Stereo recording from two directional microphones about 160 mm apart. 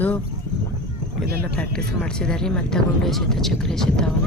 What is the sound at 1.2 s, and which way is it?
Speech, 75° right (ahead or behind).